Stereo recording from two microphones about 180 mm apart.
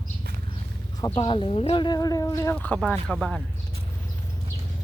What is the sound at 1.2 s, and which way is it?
Speech, 30° left (ahead or behind).